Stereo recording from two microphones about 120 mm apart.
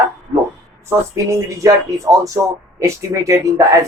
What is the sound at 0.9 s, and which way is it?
Speech, 25° right (ahead or behind).